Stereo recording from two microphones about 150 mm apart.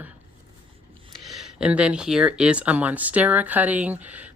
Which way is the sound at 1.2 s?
Centre (ahead or behind).